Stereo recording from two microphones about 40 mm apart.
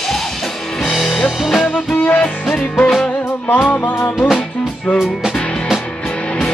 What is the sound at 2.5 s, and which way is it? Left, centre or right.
Music, left.